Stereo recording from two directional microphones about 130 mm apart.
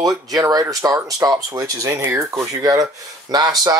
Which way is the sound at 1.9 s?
15° right (ahead or behind).